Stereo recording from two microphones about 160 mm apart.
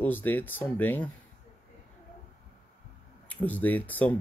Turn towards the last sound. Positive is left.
turn(degrees=10)  # may be behind; listen again after turning